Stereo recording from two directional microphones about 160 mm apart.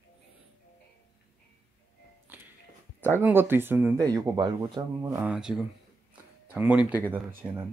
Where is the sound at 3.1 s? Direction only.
15° right (ahead or behind).